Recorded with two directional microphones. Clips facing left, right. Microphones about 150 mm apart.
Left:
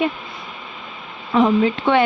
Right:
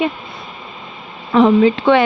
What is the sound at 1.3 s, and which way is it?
Speech, 90° right.